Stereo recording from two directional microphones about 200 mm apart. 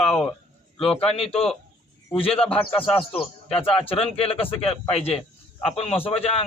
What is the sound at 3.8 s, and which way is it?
Speech, 25° left (ahead or behind).